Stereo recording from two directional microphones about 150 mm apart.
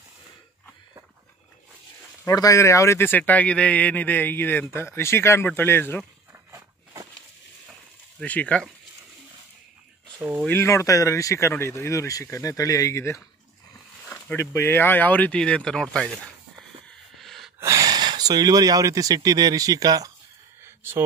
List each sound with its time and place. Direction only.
2.2 s a man's voice: 20° left (ahead or behind)
6.5 s walk: 25° right (ahead or behind)
8.2 s a man's voice: 10° left (ahead or behind)
10.4 s a man's voice: 15° left (ahead or behind)
17.2 s gasp: centre (ahead or behind)
17.6 s speech: 20° right (ahead or behind)
20.6 s a sound: 15° right (ahead or behind)